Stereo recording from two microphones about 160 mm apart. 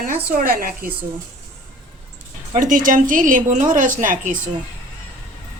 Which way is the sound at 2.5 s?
55° right (ahead or behind).